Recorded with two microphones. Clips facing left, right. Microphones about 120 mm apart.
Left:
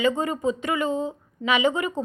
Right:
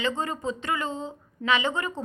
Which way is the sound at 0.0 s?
10° left (ahead or behind).